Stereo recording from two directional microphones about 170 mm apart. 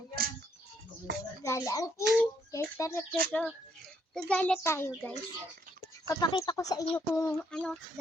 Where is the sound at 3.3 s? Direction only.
5° left (ahead or behind).